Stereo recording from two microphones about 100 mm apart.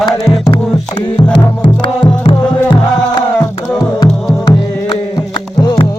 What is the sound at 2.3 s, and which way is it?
Music, 50° left (ahead or behind).